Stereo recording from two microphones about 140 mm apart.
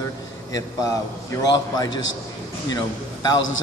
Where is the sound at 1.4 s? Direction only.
30° left (ahead or behind).